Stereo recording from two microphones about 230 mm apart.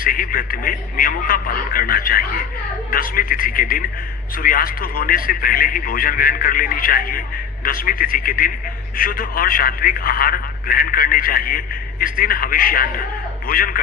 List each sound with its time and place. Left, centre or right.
0.0 s a man's voice: left